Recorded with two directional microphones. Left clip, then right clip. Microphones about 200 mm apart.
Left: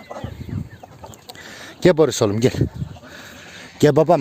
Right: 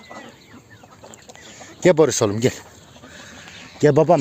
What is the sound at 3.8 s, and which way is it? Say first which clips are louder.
Speech: even; 25° left (ahead or behind).